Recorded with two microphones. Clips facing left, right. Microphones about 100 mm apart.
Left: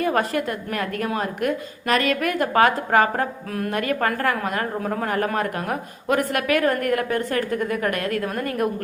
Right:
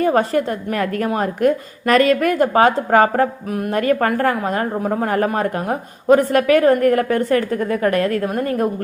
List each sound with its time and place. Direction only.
0.0 s a woman's voice: 35° right (ahead or behind)